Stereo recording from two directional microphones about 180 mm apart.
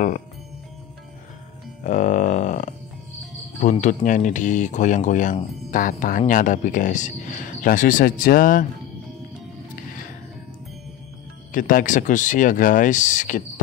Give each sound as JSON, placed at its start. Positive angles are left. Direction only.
{"t": 1.9, "sound": "a sound", "side_deg": 45}
{"t": 3.6, "sound": "speech", "side_deg": 45}
{"t": 11.5, "sound": "speech", "side_deg": 45}